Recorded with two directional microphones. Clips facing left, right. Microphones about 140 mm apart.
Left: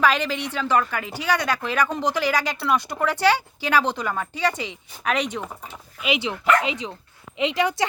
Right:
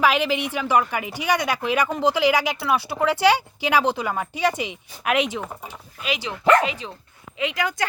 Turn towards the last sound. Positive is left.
turn(degrees=25)  # may be behind; listen again after turning